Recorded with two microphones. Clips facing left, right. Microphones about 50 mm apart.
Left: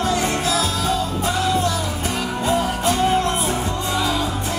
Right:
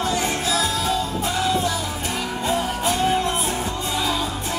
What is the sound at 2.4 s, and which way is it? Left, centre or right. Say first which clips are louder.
Music: left 3 dB; centre.